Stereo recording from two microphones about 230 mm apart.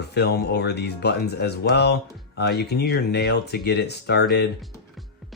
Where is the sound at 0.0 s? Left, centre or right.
Left.